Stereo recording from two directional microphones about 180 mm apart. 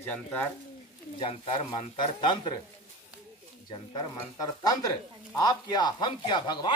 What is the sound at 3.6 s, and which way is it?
Speech, 25° left (ahead or behind).